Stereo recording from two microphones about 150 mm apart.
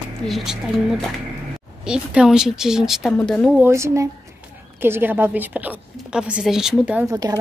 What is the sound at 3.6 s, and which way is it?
A woman's voice, 20° right (ahead or behind).